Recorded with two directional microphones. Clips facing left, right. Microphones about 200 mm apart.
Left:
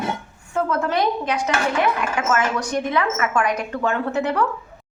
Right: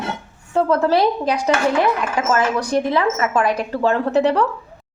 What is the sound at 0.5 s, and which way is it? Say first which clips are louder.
A woman's voice: right 5 dB; 35° right (ahead or behind).